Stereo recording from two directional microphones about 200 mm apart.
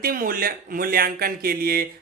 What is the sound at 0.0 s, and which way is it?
Speech, 45° right (ahead or behind).